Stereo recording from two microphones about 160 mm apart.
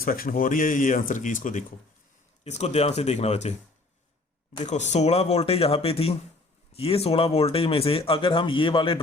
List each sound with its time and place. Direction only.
0.0 s speech: 65° left (ahead or behind)
2.4 s speech: 45° left (ahead or behind)
4.6 s speech: 45° left (ahead or behind)